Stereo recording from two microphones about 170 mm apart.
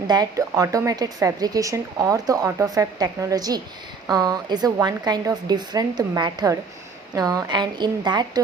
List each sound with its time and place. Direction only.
0.1 s speech: 20° right (ahead or behind)